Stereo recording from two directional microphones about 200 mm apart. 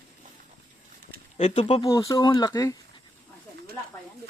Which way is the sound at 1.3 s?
35° left (ahead or behind).